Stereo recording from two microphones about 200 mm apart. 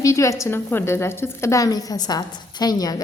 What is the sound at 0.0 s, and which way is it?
A woman's voice, 15° left (ahead or behind).